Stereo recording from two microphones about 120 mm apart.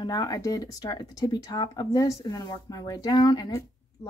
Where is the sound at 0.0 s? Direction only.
35° left (ahead or behind).